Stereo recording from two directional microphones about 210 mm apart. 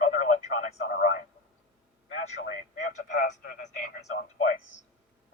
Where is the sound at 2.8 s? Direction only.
35° left (ahead or behind).